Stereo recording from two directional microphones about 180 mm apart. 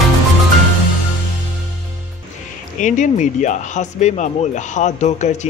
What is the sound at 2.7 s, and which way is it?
Speech, 45° left (ahead or behind).